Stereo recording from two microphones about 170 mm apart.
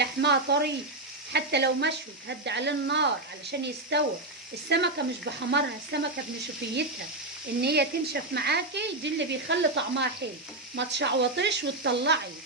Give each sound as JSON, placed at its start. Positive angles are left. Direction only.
{"t": 0.0, "sound": "speech", "side_deg": -90}
{"t": 1.3, "sound": "speech", "side_deg": -80}
{"t": 7.6, "sound": "speech", "side_deg": -70}